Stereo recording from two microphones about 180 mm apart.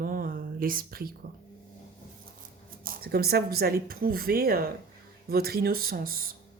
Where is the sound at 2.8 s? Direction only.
55° right (ahead or behind).